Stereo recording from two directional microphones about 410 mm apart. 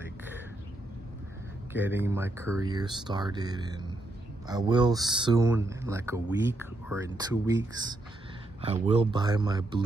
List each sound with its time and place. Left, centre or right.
1.7 s speech: centre